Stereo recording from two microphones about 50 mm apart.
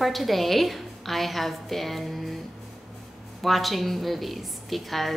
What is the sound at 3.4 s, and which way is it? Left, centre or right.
A woman's voice, centre.